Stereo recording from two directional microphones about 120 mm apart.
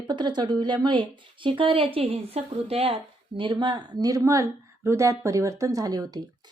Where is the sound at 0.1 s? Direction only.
40° right (ahead or behind).